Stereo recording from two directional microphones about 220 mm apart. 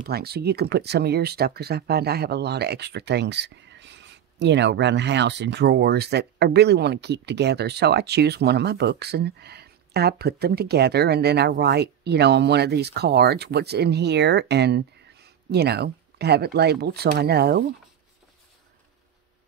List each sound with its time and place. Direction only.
0.0 s speech: 45° right (ahead or behind)